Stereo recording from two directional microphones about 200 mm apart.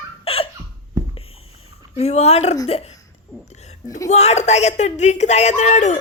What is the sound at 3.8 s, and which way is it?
Speech, 15° left (ahead or behind).